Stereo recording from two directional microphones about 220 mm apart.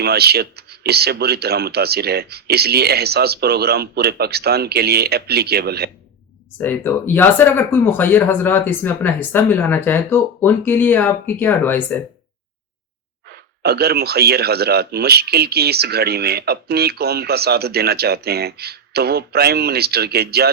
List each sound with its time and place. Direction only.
0.0 s a man's voice: 45° right (ahead or behind)
6.6 s speech: 10° left (ahead or behind)
13.6 s a man's voice: 45° right (ahead or behind)